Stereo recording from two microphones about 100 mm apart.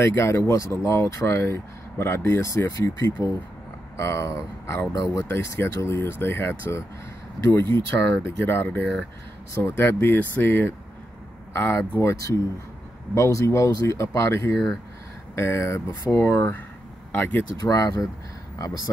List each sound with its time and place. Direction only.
0.0 s speech: 25° left (ahead or behind)
5.3 s speech: 25° left (ahead or behind)
17.6 s speech: 35° left (ahead or behind)